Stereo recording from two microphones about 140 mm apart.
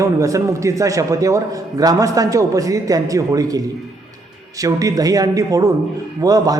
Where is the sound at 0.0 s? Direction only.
25° right (ahead or behind).